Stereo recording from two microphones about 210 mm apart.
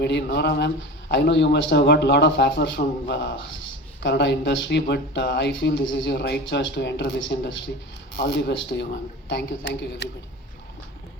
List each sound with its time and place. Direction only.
0.0 s speech: 55° left (ahead or behind)